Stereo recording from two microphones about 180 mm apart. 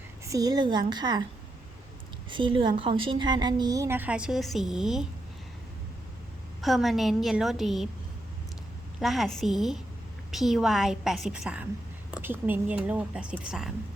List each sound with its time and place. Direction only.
0.3 s a woman's voice: 20° right (ahead or behind)
2.3 s a woman's voice: 25° right (ahead or behind); by 5.0 s 5° right (ahead or behind)
6.6 s a woman's voice: centre (ahead or behind)
9.0 s a woman's voice: centre (ahead or behind)